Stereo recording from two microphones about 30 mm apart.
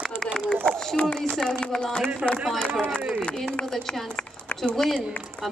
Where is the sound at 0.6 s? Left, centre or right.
Left.